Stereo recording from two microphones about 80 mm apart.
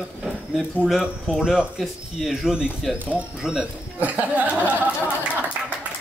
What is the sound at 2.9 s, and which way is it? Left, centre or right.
Speech, centre.